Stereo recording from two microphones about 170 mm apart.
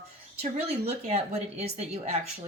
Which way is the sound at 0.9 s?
40° right (ahead or behind).